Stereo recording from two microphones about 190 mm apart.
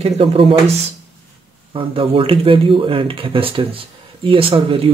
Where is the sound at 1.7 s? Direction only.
30° right (ahead or behind).